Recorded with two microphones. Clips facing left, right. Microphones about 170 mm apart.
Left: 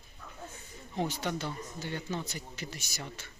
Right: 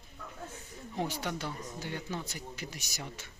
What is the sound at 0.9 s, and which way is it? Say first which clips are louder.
Speech: left 2 dB; 10° right (ahead or behind).